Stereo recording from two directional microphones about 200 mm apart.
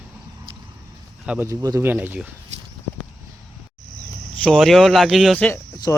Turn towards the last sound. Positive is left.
turn(degrees=15)  # may be behind; listen again after turning